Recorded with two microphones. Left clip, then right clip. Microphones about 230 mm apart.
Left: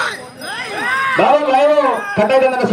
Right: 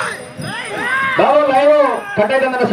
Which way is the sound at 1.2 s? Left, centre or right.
Left.